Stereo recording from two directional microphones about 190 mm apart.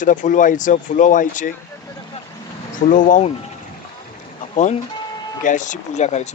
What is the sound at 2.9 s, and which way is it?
Speech, 40° left (ahead or behind).